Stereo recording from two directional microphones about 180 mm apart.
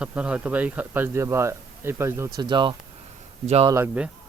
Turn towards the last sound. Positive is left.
turn(degrees=-10)  # may be behind; listen again after turning